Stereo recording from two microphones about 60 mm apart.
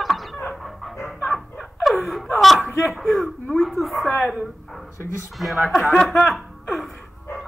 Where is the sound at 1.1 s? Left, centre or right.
Centre.